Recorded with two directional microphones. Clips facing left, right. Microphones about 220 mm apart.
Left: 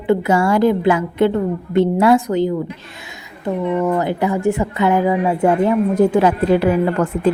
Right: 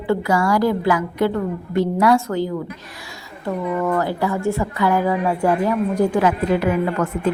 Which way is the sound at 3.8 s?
20° left (ahead or behind).